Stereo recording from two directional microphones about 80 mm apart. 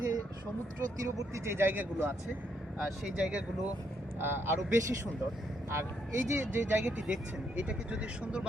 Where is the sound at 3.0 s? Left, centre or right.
Centre.